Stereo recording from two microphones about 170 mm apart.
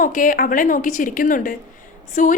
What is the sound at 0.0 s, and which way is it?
A woman's voice, 50° left (ahead or behind).